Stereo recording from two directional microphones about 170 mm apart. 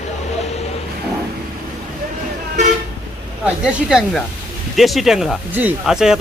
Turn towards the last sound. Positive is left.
turn(degrees=-5)  # may be behind; listen again after turning